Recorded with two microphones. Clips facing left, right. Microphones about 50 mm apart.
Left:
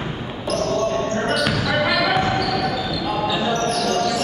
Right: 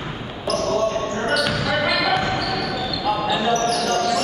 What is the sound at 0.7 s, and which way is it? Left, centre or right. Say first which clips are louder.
Basketball bounce: left 1 dB; centre.